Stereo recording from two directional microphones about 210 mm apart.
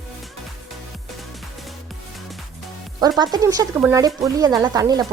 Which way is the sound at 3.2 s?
15° right (ahead or behind).